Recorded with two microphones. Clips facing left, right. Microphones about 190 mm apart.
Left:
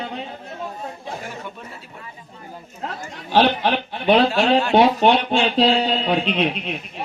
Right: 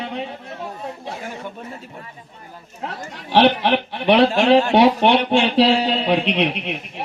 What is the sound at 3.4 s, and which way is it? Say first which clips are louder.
Speech: right 3 dB; 70° right (ahead or behind).